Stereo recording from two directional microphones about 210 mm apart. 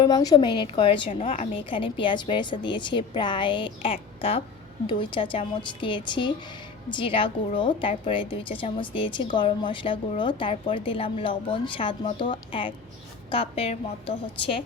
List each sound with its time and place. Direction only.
0.0 s a woman's voice: 20° left (ahead or behind)